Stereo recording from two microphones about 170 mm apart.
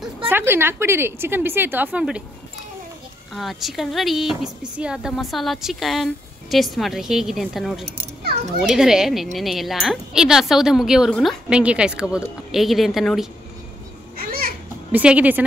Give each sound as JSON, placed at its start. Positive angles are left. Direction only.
{"t": 0.3, "sound": "a woman's voice", "side_deg": -15}
{"t": 3.3, "sound": "speech", "side_deg": 0}
{"t": 14.1, "sound": "children playing", "side_deg": -60}
{"t": 14.9, "sound": "a woman's voice", "side_deg": -10}